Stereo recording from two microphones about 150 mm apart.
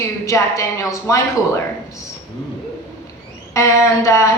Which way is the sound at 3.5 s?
20° left (ahead or behind).